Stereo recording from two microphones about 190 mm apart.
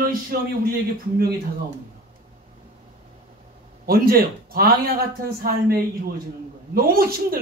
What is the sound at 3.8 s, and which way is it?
Speech, 50° right (ahead or behind).